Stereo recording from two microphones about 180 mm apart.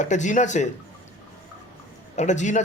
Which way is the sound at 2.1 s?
40° left (ahead or behind).